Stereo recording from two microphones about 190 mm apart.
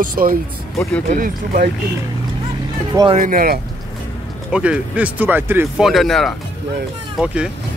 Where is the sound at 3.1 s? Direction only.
45° right (ahead or behind).